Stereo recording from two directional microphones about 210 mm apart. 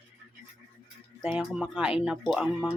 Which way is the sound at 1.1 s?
Centre (ahead or behind).